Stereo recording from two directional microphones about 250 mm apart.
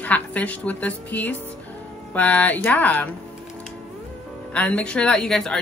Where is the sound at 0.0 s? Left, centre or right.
Centre.